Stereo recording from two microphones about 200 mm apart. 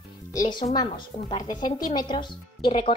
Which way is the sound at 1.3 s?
20° left (ahead or behind).